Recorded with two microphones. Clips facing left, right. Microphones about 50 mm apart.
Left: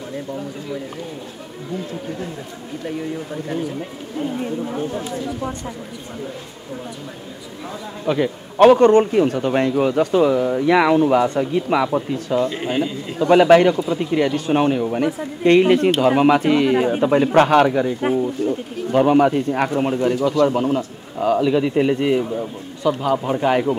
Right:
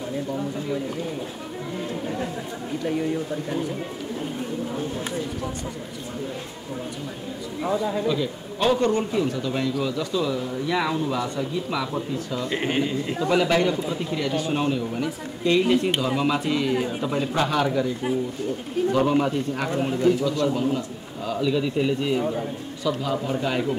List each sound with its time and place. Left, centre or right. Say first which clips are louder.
4.7 s speech: left 3 dB; left
8.1 s speech: left 8 dB; left
8.5 s speech: left 11 dB; left
12.4 s speech: left 3 dB; right
13.2 s speech: left 10 dB; left
19.7 s a man's voice: left 2 dB; left